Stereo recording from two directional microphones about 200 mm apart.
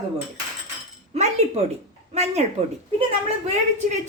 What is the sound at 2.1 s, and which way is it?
Speech, 35° right (ahead or behind).